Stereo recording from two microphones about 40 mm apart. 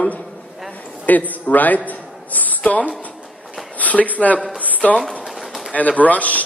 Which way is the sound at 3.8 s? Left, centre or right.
Left.